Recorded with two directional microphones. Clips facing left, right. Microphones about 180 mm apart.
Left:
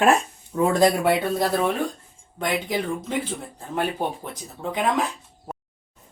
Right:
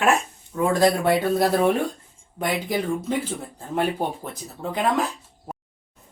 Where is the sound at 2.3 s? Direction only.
10° right (ahead or behind).